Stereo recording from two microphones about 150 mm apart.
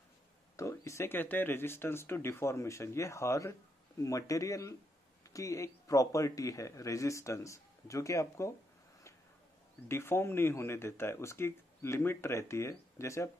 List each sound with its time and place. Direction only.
0.6 s a man's voice: 20° left (ahead or behind)
9.8 s speech: 15° left (ahead or behind)